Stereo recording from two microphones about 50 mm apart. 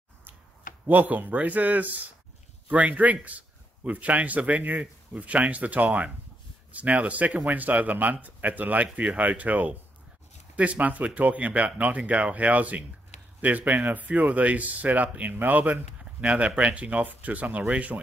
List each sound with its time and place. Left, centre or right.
0.8 s a man's voice: right
16.2 s a man's voice: right